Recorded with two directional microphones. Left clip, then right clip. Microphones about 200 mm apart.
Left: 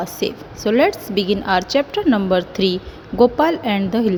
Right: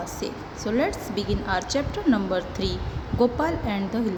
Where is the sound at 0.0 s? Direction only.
40° left (ahead or behind).